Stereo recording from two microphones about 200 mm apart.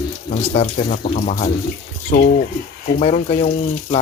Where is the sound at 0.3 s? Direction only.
35° left (ahead or behind).